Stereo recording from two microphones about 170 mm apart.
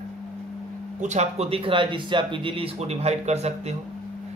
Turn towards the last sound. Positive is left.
turn(degrees=-40)  # may be behind; listen again after turning